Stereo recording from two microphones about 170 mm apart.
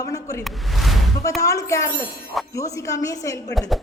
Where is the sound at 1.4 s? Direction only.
20° left (ahead or behind).